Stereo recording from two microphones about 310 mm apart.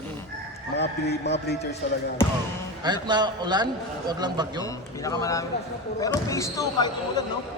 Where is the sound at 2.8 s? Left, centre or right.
Centre.